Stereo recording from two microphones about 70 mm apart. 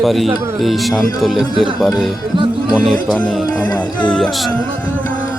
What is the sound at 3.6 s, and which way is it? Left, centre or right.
Music, left.